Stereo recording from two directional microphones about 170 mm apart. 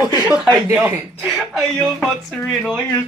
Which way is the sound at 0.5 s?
15° right (ahead or behind).